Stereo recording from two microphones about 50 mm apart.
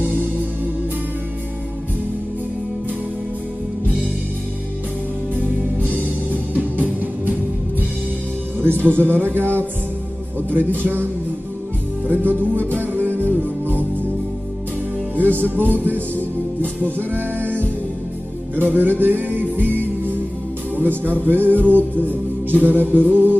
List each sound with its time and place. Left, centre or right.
6.0 s music: right
8.5 s speech: right
10.8 s speech: right
12.1 s music: right
15.1 s music: right
16.8 s music: right
18.6 s music: right
20.7 s speech: right
21.6 s music: right